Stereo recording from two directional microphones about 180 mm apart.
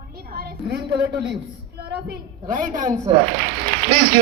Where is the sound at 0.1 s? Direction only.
55° right (ahead or behind).